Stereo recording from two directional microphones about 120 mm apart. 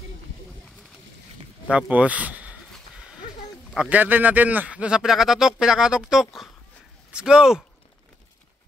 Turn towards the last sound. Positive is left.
turn(degrees=-5)  # may be behind; listen again after turning